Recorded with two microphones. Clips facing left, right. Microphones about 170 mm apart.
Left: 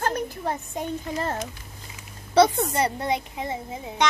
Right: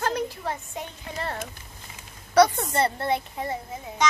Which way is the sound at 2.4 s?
25° left (ahead or behind).